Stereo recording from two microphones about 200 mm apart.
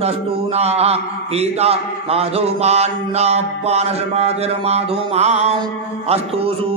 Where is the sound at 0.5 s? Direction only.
30° right (ahead or behind).